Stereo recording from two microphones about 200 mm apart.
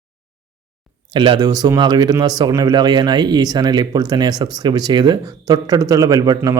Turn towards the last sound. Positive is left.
turn(degrees=-20)  # may be behind; listen again after turning